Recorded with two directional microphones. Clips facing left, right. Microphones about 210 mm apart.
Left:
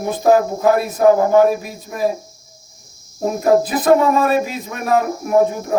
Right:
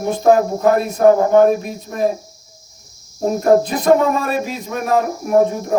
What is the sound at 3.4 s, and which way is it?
Speech, 5° left (ahead or behind).